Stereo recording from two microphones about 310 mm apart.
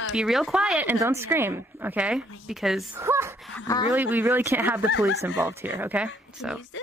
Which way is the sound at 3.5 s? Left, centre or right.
Centre.